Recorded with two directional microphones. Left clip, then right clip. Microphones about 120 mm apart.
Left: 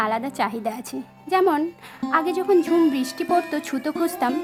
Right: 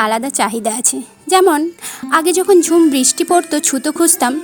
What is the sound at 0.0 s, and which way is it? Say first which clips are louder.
A woman's voice: right 8 dB; 40° right (ahead or behind).